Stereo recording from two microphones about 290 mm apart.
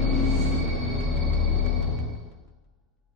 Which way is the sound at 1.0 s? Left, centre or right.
Centre.